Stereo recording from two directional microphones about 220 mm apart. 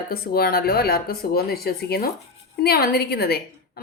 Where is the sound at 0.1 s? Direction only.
45° left (ahead or behind).